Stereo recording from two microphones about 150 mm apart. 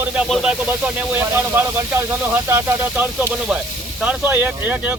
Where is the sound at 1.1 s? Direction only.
15° right (ahead or behind).